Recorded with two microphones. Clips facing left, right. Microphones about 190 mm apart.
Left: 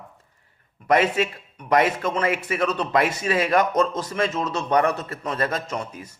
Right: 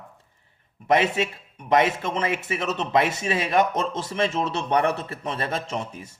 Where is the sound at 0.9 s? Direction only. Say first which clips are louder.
Left 1 dB; 25° right (ahead or behind).